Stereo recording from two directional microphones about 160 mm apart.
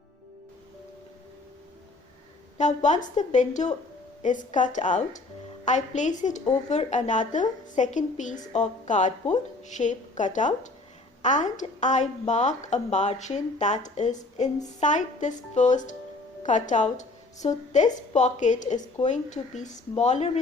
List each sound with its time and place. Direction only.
2.6 s a woman's voice: 50° left (ahead or behind)